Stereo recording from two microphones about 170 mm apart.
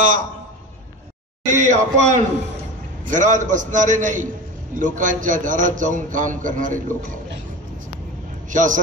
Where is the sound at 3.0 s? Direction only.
45° right (ahead or behind).